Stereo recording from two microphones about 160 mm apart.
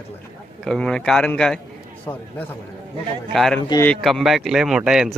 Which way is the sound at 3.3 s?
Centre (ahead or behind).